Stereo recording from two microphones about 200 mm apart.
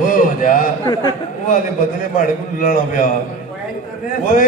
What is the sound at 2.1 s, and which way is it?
Speech, 40° left (ahead or behind).